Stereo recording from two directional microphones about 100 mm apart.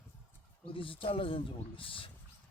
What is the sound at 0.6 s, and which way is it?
Speech, 60° left (ahead or behind).